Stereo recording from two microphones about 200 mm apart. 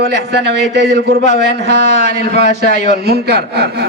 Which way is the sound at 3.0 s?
55° right (ahead or behind).